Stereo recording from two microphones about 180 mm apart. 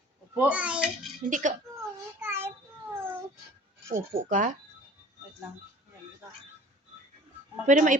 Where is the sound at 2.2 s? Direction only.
15° right (ahead or behind).